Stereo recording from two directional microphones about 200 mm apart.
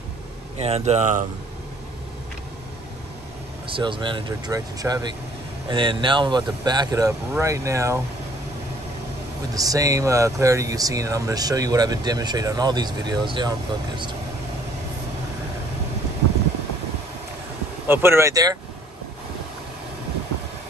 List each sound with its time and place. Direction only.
0.6 s speech: 30° right (ahead or behind)
3.6 s speech: 25° right (ahead or behind)
9.5 s speech: 15° right (ahead or behind)
17.8 s speech: 10° right (ahead or behind)